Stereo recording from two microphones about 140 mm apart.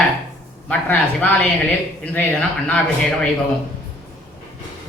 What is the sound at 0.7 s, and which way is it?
Speech, 10° left (ahead or behind).